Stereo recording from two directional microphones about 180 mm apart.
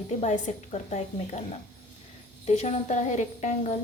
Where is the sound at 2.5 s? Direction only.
40° left (ahead or behind).